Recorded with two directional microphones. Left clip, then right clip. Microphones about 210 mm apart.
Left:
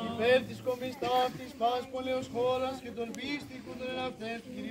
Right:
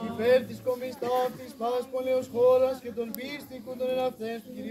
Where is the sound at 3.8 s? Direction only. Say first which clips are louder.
Right 8 dB; 50° right (ahead or behind).